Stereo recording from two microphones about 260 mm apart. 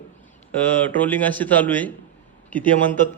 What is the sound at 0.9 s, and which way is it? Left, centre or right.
A man's voice, centre.